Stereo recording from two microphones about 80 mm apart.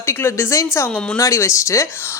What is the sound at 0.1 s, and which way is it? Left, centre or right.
Speech, left.